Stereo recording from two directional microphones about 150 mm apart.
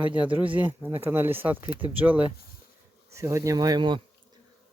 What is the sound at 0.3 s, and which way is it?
Speech, 10° right (ahead or behind).